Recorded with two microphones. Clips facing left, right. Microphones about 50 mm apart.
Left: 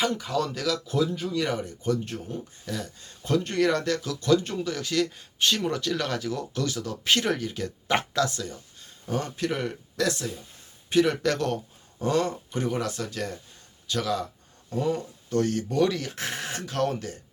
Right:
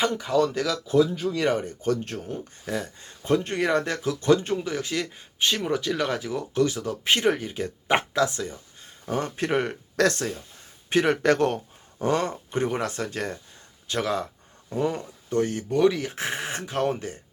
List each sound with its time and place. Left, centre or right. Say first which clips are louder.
0.0 s speech: right 4 dB; centre
1.3 s speech: right 3 dB; right
10.0 s speech: right 5 dB; right
10.8 s speech: right 2 dB; right
15.4 s speech: right 2 dB; centre